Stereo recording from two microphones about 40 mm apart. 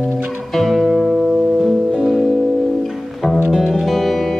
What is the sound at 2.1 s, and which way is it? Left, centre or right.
Music, centre.